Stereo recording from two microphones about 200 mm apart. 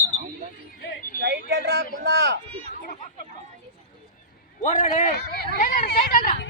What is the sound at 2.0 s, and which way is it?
Speech, 55° right (ahead or behind).